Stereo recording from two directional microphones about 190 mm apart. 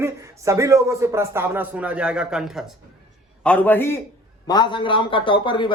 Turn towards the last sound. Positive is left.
turn(degrees=25)  # may be behind; listen again after turning